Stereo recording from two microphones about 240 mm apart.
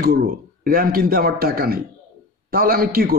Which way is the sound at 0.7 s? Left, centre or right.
Right.